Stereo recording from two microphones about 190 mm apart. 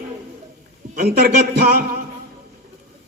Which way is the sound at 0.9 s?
55° right (ahead or behind).